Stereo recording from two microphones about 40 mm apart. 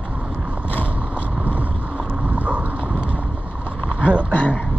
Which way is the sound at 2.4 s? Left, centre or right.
Right.